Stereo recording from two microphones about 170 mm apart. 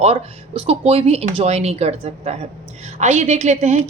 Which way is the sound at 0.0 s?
35° right (ahead or behind).